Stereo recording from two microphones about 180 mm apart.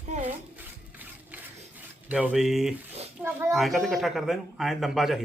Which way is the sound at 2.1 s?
5° right (ahead or behind).